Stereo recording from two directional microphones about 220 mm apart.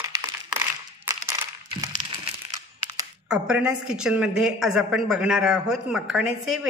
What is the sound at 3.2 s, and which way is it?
A woman's voice, 5° right (ahead or behind).